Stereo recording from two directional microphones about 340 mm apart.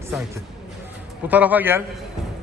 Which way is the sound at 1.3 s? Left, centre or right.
Centre.